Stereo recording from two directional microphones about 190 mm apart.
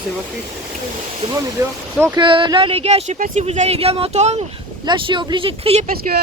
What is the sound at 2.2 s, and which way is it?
Speech, 25° right (ahead or behind).